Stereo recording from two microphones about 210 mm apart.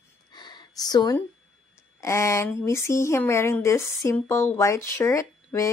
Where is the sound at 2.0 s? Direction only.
15° left (ahead or behind).